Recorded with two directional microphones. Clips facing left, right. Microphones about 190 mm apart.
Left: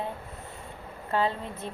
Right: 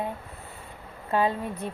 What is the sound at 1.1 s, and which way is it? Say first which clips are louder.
Speech: right 3 dB; 15° right (ahead or behind).